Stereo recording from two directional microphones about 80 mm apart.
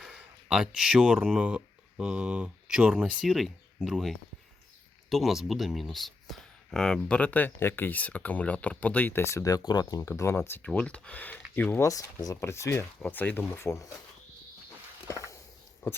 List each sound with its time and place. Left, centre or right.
0.2 s speech: centre
7.2 s speech: left
9.2 s speech: left
9.6 s speech: left
10.0 s speech: left
10.8 s speech: centre
11.8 s speech: left
13.1 s speech: left
15.0 s a sound: left
15.8 s speech: left